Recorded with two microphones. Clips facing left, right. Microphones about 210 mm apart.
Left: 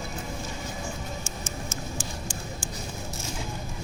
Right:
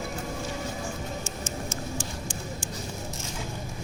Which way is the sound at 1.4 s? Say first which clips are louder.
Right 2 dB; 25° right (ahead or behind).